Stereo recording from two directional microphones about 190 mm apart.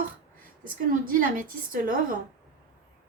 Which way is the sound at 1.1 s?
45° right (ahead or behind).